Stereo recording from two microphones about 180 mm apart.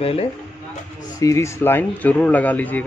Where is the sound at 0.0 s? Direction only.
30° left (ahead or behind).